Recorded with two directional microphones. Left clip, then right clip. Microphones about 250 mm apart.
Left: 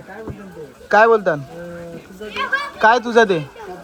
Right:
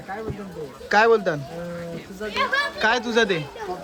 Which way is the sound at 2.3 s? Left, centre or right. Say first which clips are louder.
Left 1 dB; right.